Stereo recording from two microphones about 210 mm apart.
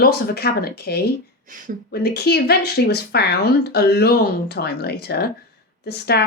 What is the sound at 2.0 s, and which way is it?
Speech, 50° left (ahead or behind).